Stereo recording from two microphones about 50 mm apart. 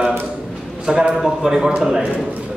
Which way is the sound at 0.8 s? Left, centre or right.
Centre.